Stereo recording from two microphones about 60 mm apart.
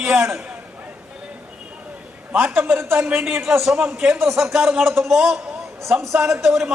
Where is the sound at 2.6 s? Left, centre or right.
Right.